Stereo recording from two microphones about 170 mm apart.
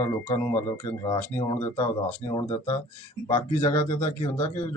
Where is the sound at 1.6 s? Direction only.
25° left (ahead or behind).